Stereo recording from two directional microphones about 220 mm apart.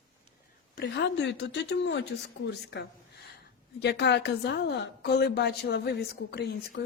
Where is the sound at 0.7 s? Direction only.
50° left (ahead or behind).